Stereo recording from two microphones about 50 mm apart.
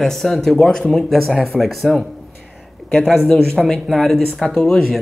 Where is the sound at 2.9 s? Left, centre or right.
Centre.